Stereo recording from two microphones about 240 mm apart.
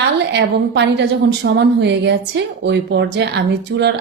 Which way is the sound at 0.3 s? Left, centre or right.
Right.